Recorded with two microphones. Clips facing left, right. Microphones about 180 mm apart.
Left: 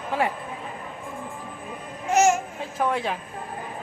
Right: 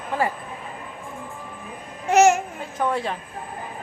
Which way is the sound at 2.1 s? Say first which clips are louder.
Right 4 dB; 65° right (ahead or behind).